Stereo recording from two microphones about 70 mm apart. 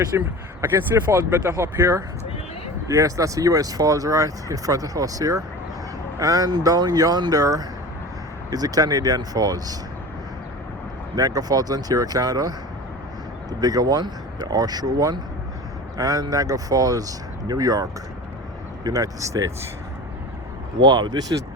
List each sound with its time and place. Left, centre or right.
0.1 s speech: right
1.1 s speech: right
2.8 s speech: right
11.1 s speech: right
16.0 s speech: right
18.9 s speech: right
20.8 s speech: right